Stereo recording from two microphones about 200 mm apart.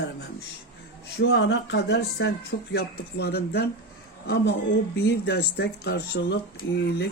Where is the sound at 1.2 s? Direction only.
60° left (ahead or behind).